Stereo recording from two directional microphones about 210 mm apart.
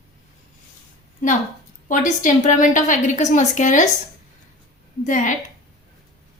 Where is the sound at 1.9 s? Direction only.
35° left (ahead or behind).